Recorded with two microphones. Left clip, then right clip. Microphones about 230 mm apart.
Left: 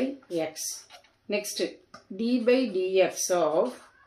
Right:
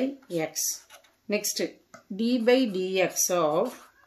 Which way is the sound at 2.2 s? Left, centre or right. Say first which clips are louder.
Right 1 dB; right.